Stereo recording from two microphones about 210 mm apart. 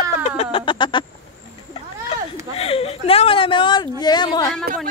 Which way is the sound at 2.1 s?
25° left (ahead or behind).